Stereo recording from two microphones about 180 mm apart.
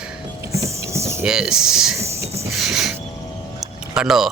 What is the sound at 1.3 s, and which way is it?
Speech, 5° right (ahead or behind).